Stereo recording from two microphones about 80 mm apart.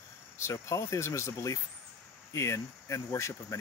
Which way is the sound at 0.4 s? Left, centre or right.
Left.